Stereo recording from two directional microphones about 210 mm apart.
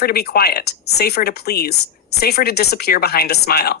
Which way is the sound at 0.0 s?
50° left (ahead or behind).